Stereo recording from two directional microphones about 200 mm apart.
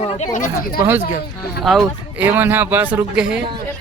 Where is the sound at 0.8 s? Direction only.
10° right (ahead or behind).